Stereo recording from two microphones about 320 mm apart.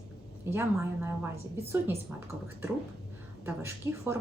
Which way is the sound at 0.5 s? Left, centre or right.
Centre.